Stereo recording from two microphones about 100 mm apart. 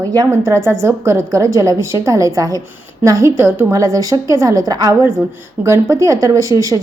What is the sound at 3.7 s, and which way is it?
A woman's voice, 35° right (ahead or behind).